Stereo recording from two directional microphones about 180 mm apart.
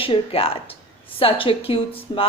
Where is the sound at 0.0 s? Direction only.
30° left (ahead or behind).